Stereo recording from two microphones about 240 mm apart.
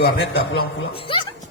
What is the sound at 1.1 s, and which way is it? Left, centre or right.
Music, left.